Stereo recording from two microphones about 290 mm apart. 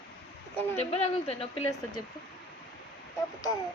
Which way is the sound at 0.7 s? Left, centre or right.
Left.